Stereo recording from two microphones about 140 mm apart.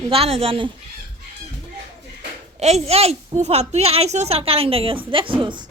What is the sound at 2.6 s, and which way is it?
A woman's voice, 50° right (ahead or behind).